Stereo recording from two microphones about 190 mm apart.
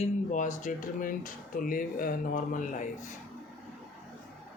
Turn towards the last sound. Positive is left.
turn(degrees=40)  # may be behind; listen again after turning